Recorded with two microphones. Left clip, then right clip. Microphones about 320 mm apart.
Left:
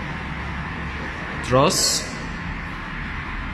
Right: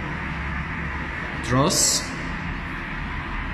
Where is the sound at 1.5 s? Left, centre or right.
Centre.